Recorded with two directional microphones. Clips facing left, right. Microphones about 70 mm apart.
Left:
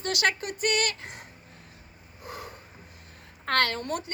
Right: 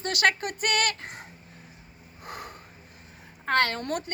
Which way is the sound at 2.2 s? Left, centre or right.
Right.